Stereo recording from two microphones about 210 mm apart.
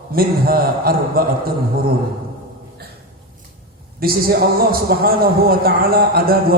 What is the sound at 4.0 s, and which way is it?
A man's voice, 45° right (ahead or behind).